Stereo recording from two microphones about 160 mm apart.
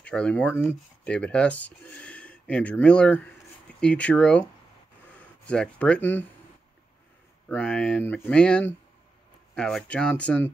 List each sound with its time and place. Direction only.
0.0 s speech: 5° left (ahead or behind)
7.4 s speech: 5° left (ahead or behind)